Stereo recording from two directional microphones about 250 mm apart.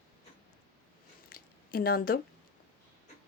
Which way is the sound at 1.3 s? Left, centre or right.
Left.